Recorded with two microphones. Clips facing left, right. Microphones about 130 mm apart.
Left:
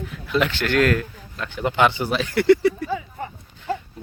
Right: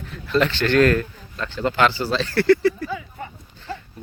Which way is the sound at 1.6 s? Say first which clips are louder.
Even; 20° left (ahead or behind).